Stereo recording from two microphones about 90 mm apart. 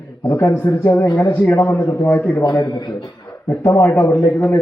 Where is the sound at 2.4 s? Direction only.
55° left (ahead or behind).